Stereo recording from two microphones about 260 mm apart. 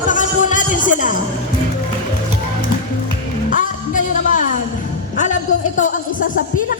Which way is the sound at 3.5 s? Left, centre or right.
Left.